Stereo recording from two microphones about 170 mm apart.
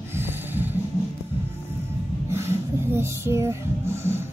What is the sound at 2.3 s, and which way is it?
Music, 15° right (ahead or behind).